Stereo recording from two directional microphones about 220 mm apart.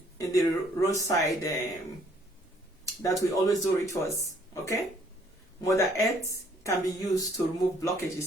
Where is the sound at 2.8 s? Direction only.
15° left (ahead or behind).